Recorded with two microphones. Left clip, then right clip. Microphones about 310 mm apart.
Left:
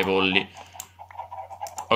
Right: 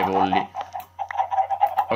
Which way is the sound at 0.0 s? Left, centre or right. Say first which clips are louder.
Right 2 dB; centre.